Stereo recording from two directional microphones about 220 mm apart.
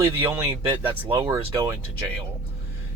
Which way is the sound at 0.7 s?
10° right (ahead or behind).